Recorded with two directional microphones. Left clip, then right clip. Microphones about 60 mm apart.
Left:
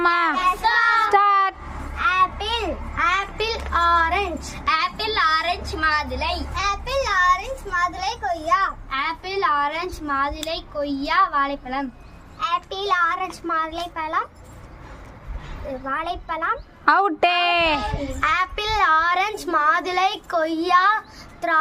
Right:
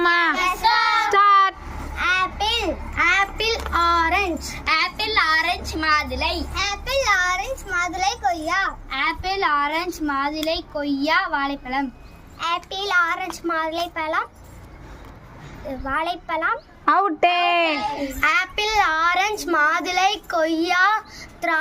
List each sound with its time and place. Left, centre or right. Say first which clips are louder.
0.0 s child singing: even; left
1.2 s a sound: right 3 dB; left
3.0 s child singing: right 2 dB; left
6.5 s a sound: even; centre
8.9 s speech: right 2 dB; left
12.4 s a child's voice: left 1 dB; centre
15.8 s a child's voice: right 3 dB; centre
16.8 s a woman's voice: even; left